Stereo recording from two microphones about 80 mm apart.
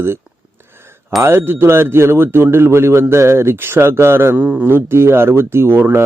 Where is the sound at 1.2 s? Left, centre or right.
Right.